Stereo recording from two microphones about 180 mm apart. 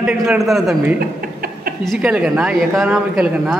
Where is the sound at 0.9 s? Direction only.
55° right (ahead or behind).